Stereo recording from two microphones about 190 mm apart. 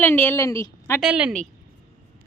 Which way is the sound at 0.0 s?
10° left (ahead or behind).